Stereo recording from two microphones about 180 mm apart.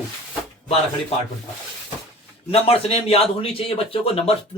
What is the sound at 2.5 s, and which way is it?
Speech, 30° left (ahead or behind).